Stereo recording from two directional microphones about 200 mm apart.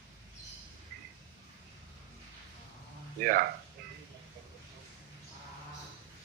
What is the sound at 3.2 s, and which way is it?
Speech, 45° right (ahead or behind).